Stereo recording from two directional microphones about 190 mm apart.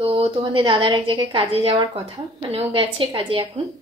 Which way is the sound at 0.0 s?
30° right (ahead or behind).